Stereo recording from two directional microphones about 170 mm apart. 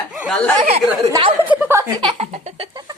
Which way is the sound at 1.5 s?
10° right (ahead or behind).